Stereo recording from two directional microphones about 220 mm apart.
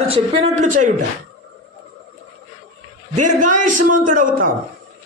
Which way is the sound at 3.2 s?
35° right (ahead or behind).